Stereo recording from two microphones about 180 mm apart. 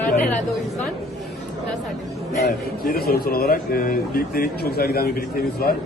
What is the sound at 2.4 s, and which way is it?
Speech, 60° left (ahead or behind).